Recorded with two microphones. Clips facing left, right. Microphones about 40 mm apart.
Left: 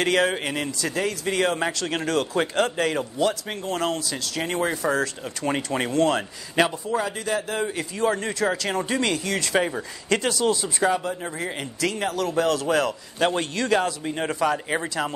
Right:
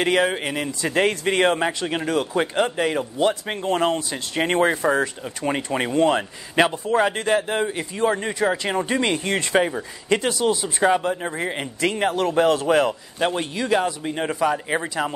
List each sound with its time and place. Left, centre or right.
0.0 s a man's voice: centre
0.7 s speech: right
0.9 s speech: right
1.9 s a man's voice: centre
3.2 s speech: right
4.8 s speech: centre
5.2 s a man's voice: centre; by 7.6 s right
7.6 s speech: centre
9.6 s a man's voice: centre
10.0 s speech: centre
13.2 s a man's voice: centre